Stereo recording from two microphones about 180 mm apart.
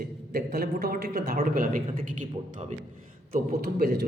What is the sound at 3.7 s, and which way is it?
Speech, 60° right (ahead or behind).